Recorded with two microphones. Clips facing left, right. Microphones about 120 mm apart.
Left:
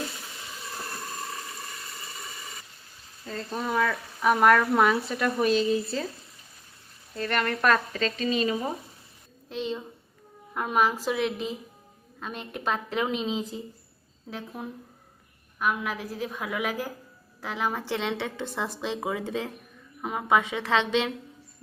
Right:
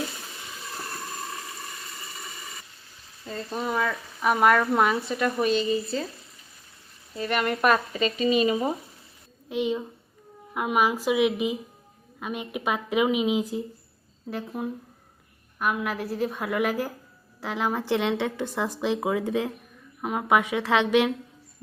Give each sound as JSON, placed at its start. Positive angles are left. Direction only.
{"t": 3.2, "sound": "speech", "side_deg": -5}
{"t": 7.2, "sound": "speech", "side_deg": -10}
{"t": 17.4, "sound": "speech", "side_deg": -15}